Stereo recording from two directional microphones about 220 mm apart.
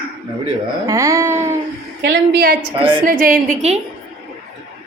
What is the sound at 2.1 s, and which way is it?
A woman's voice, 55° right (ahead or behind).